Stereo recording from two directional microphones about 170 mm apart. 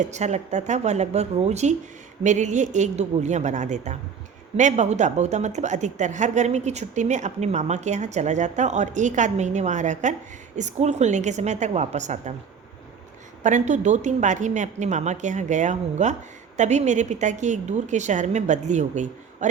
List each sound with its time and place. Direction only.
0.0 s a woman's voice: 40° right (ahead or behind)
13.4 s a woman's voice: 45° right (ahead or behind)